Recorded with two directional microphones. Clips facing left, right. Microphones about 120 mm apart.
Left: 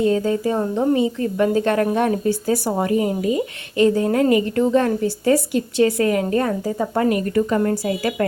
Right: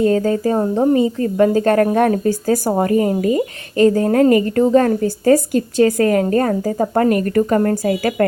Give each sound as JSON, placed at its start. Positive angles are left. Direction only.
{"t": 0.0, "sound": "a woman's voice", "side_deg": -45}